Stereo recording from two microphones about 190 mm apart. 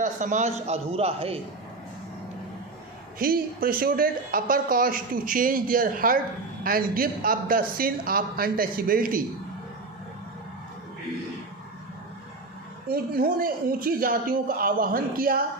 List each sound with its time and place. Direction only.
0.0 s a man's voice: 40° right (ahead or behind)
3.2 s speech: 50° right (ahead or behind)
12.9 s speech: 50° right (ahead or behind)